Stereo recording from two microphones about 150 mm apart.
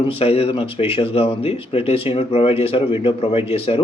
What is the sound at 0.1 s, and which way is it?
Speech, 40° left (ahead or behind).